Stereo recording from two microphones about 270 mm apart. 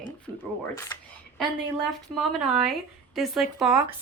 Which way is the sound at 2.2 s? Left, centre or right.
Centre.